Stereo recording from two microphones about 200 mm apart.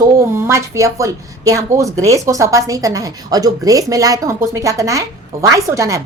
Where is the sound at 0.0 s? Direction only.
15° right (ahead or behind).